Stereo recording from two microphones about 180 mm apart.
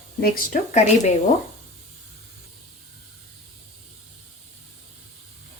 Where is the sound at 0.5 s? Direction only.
45° left (ahead or behind).